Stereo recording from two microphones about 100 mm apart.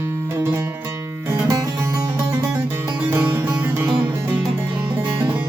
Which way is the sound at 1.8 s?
25° right (ahead or behind).